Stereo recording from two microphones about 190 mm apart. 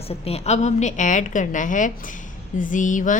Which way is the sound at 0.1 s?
35° left (ahead or behind).